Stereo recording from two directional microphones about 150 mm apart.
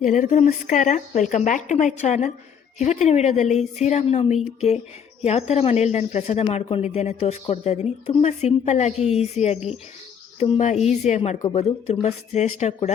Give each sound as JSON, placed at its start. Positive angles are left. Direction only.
{"t": 0.0, "sound": "speech", "side_deg": 55}